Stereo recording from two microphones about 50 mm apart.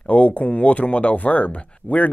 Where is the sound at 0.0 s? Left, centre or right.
Left.